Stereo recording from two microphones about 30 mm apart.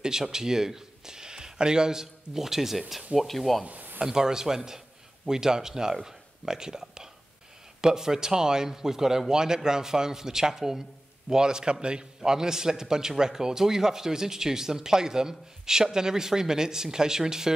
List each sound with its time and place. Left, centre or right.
0.0 s speech: centre
3.2 s speech: centre
4.0 s a man's voice: centre
12.2 s speech: centre